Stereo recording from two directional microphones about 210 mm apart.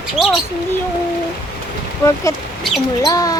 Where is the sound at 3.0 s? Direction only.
15° left (ahead or behind).